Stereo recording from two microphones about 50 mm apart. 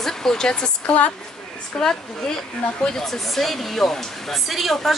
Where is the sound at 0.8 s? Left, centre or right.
Left.